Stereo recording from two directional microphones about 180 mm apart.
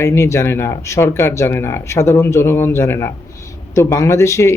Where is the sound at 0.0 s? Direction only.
15° left (ahead or behind).